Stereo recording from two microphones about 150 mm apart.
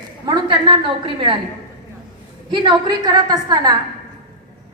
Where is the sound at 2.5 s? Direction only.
30° right (ahead or behind).